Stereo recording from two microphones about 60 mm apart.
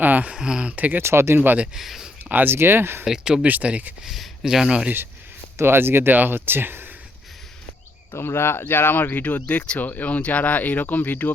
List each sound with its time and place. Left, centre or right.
0.0 s a sound: right
0.3 s speech: centre
0.8 s speech: right
1.0 s speech: right
1.5 s speech: centre
2.3 s speech: right
3.0 s speech: centre
3.4 s speech: right
4.0 s speech: centre
5.5 s speech: right
8.1 s speech: left